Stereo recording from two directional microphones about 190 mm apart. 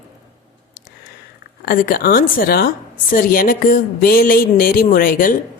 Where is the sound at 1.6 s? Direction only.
50° left (ahead or behind).